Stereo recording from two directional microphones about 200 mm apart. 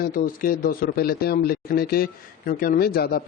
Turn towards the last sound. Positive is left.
turn(degrees=50)  # may be behind; listen again after turning